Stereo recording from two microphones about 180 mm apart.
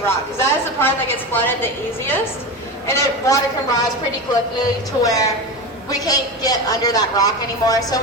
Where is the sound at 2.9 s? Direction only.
15° left (ahead or behind).